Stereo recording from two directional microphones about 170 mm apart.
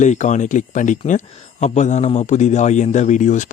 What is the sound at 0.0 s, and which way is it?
Speech, 45° left (ahead or behind).